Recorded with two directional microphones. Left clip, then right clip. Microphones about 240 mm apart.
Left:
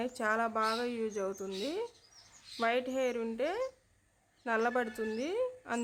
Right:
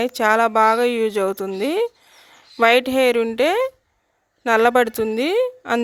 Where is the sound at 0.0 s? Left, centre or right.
Right.